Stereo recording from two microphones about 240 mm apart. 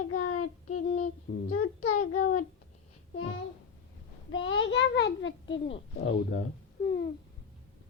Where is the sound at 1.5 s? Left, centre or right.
Left.